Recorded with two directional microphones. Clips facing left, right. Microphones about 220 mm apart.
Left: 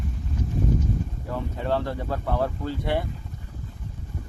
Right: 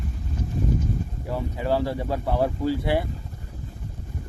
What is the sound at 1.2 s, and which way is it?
Speech, 5° right (ahead or behind).